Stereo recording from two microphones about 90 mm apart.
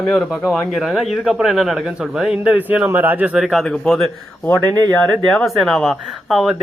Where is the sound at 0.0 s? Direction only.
Centre (ahead or behind); by 3.3 s 20° right (ahead or behind).